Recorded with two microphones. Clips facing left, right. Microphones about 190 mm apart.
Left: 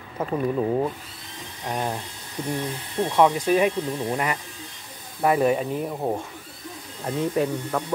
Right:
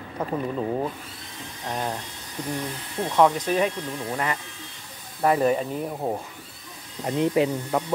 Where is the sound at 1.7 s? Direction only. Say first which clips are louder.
Left 2 dB; 10° left (ahead or behind).